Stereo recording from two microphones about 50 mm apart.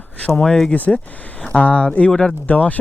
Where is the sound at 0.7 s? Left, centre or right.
Left.